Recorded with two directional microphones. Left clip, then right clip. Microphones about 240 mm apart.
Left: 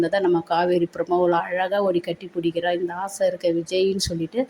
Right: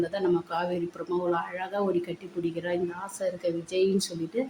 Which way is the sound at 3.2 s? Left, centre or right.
Left.